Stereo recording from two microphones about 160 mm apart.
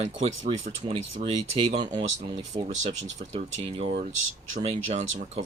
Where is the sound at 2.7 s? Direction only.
45° right (ahead or behind).